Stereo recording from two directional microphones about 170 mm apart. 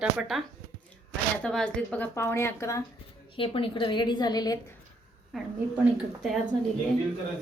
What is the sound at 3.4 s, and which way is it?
A woman's voice, 30° left (ahead or behind).